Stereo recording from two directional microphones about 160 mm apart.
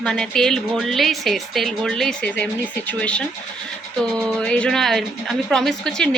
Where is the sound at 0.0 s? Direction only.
5° left (ahead or behind).